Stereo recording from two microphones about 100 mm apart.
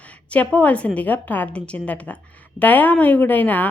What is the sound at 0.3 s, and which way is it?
Speech, 15° left (ahead or behind).